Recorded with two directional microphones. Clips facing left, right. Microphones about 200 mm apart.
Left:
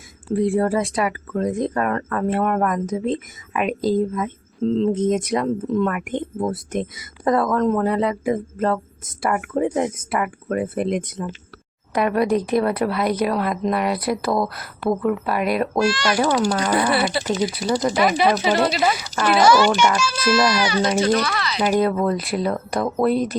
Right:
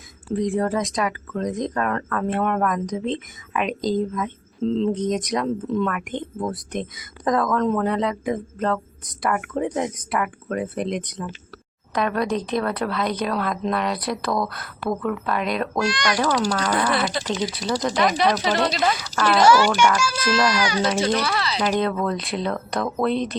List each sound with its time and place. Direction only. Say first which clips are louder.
0.3 s speech: left 3 dB; 10° left (ahead or behind)
14.3 s speech: left 2 dB; 25° left (ahead or behind)
15.0 s speech: left 3 dB; 5° left (ahead or behind)
15.9 s a child's voice: left 3 dB; 15° right (ahead or behind)
16.5 s speech: left 3 dB; 10° left (ahead or behind)
19.5 s a child's voice: left 1 dB; 10° right (ahead or behind)
20.2 s speech: left 3 dB; 10° left (ahead or behind)
20.5 s a child's voice: left 2 dB; 10° right (ahead or behind)
21.3 s speech: right 1 dB; 30° right (ahead or behind)
21.6 s speech: left 5 dB; 5° left (ahead or behind)